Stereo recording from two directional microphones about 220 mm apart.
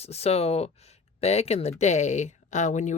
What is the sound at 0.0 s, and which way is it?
Speech, 30° left (ahead or behind).